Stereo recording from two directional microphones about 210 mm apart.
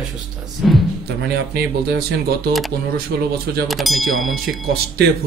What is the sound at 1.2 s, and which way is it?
Speech, 50° right (ahead or behind).